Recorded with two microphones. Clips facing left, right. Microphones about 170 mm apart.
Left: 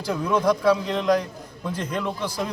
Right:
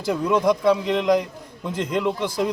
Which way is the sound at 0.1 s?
20° right (ahead or behind).